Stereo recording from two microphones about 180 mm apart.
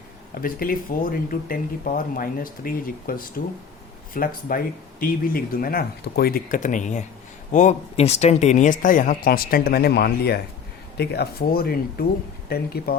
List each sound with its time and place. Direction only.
0.4 s speech: 50° left (ahead or behind)